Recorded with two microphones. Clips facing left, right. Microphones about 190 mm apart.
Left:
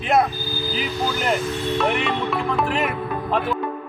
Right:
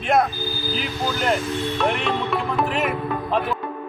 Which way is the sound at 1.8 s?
Centre (ahead or behind).